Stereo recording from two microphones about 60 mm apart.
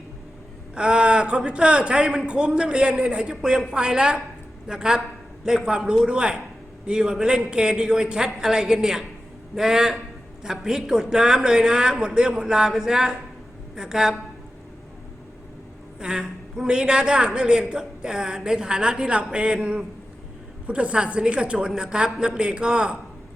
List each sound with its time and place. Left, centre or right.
0.8 s a woman's voice: centre
16.0 s a woman's voice: centre